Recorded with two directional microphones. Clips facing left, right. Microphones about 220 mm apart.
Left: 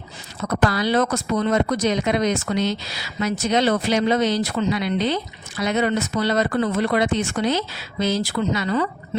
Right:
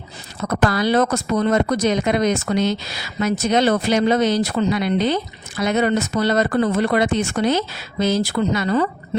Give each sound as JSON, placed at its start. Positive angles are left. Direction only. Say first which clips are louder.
{"t": 0.4, "sound": "speech", "louder": "right 2 dB", "side_deg": -50}